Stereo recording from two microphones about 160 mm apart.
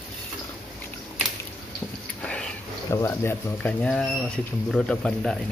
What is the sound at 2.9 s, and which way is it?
Speech, 15° left (ahead or behind).